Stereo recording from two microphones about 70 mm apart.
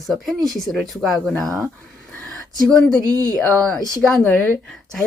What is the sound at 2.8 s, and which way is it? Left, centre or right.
Speech, centre.